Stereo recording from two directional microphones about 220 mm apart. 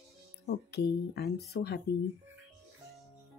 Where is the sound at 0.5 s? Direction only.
50° left (ahead or behind).